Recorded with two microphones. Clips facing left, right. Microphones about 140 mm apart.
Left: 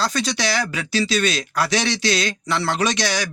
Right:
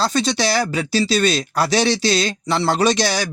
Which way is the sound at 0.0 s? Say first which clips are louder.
Right 4 dB; 30° right (ahead or behind).